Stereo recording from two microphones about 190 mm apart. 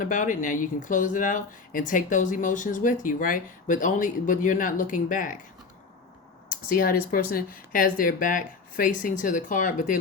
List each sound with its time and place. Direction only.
0.0 s speech: 40° left (ahead or behind)
6.5 s speech: 50° left (ahead or behind)